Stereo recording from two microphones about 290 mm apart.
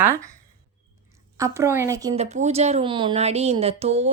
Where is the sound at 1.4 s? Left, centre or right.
Centre.